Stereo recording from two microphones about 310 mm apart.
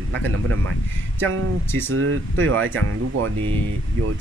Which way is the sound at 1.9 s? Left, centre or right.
Right.